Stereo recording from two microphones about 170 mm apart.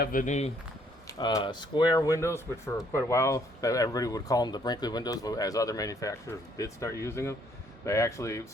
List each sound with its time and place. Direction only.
0.0 s speech: 55° left (ahead or behind)
1.0 s speech: 25° left (ahead or behind)